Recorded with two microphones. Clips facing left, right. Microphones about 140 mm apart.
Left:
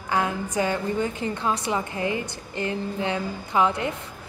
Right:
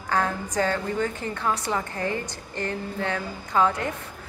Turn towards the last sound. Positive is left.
turn(degrees=20)  # may be behind; listen again after turning